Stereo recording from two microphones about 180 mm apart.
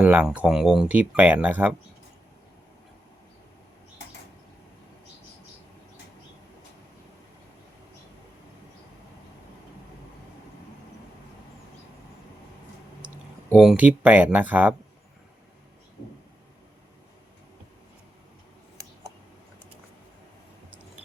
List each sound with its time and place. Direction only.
0.0 s speech: 5° right (ahead or behind)
13.5 s speech: 5° right (ahead or behind)